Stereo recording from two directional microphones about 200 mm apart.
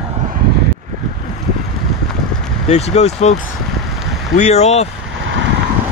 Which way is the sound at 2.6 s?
35° left (ahead or behind).